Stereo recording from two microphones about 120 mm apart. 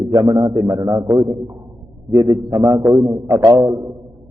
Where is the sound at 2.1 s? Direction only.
30° right (ahead or behind).